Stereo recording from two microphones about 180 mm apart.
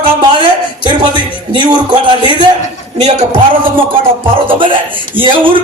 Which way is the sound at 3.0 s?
40° right (ahead or behind).